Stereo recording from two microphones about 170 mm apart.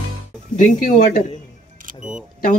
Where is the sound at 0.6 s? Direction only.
50° left (ahead or behind).